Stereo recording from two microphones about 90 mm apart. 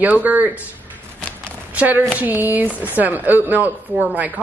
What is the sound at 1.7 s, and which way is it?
A woman's voice, 15° right (ahead or behind).